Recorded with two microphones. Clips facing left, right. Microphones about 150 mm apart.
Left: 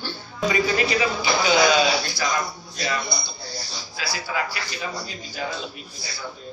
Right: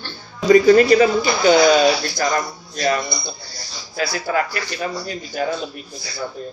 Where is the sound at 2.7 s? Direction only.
50° right (ahead or behind).